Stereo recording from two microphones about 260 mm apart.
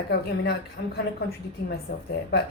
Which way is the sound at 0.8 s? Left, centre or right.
Left.